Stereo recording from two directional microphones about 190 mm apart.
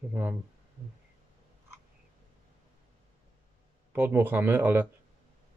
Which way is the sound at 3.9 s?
10° right (ahead or behind).